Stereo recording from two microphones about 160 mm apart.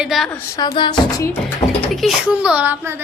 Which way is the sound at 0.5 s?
25° left (ahead or behind).